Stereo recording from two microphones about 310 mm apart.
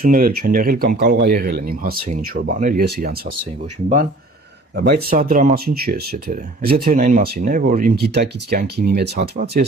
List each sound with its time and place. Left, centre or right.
0.0 s speech: right
4.7 s speech: right